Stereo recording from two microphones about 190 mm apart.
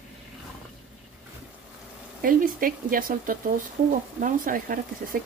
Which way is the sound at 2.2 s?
45° right (ahead or behind).